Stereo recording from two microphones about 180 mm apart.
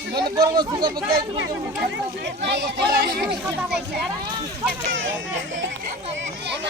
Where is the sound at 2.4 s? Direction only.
65° right (ahead or behind).